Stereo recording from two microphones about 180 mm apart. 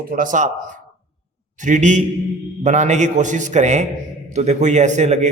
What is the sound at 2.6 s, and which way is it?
A man's voice, 40° right (ahead or behind).